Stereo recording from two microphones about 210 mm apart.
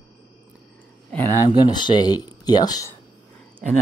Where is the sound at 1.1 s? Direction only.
10° left (ahead or behind).